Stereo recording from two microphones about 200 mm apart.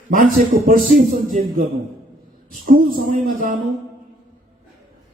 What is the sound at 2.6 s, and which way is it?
Speech, 45° right (ahead or behind).